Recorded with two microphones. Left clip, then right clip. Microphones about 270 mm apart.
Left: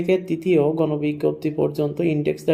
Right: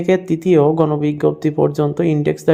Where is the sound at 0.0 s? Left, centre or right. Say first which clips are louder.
Right 5 dB; right.